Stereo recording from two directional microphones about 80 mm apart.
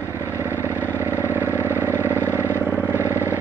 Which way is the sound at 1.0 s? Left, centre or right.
Right.